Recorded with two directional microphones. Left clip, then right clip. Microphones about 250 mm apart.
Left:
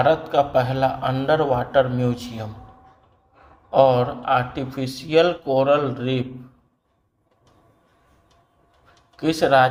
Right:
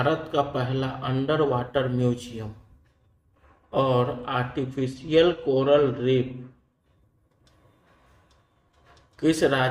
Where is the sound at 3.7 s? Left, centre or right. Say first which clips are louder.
Left 7 dB; centre.